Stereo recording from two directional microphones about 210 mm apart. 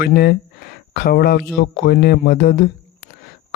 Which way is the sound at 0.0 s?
50° left (ahead or behind).